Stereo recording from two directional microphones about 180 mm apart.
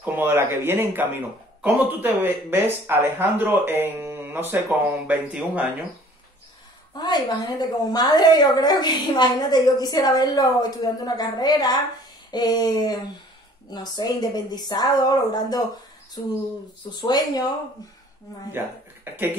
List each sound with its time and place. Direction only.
0.0 s speech: 10° right (ahead or behind)
7.0 s a woman's voice: 25° left (ahead or behind)
16.9 s a woman's voice: 20° left (ahead or behind)